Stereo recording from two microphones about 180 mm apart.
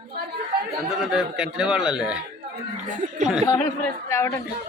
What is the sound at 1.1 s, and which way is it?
A man's voice, 5° right (ahead or behind).